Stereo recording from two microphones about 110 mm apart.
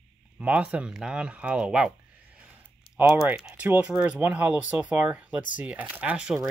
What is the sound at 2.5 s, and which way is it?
Typing, 15° right (ahead or behind).